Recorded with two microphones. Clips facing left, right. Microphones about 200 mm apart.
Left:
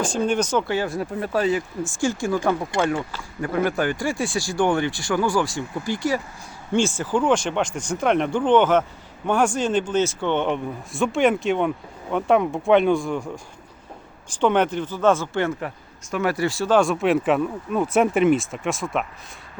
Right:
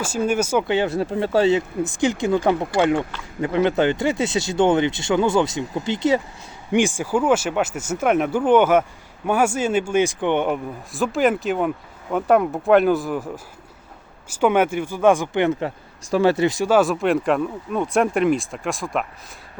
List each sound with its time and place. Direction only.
0.0 s speech: 5° right (ahead or behind)
0.7 s speech: 25° right (ahead or behind)
16.0 s speech: 30° right (ahead or behind)
16.7 s speech: centre (ahead or behind)